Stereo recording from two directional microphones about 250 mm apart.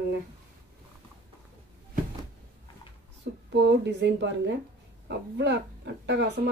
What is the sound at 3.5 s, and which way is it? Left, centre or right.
A woman's voice, right.